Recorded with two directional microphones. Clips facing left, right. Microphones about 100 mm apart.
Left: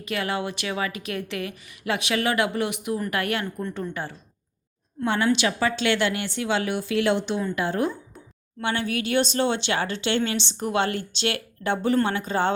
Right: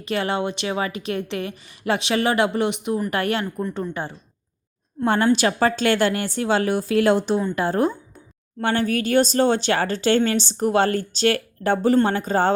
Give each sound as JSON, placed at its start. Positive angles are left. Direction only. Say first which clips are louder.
{"t": 0.0, "sound": "a woman's voice", "louder": "right 4 dB", "side_deg": -30}
{"t": 3.4, "sound": "a woman's voice", "louder": "right 4 dB", "side_deg": -5}
{"t": 4.0, "sound": "a woman's voice", "louder": "right 3 dB", "side_deg": -25}
{"t": 5.0, "sound": "a woman's voice", "louder": "right 4 dB", "side_deg": -45}